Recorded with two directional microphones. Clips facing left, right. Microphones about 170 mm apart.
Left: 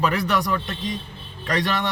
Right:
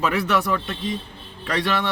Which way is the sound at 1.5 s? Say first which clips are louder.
Even; centre (ahead or behind).